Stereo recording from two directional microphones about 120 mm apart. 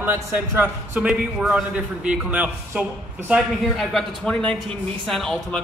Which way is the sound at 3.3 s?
Centre (ahead or behind).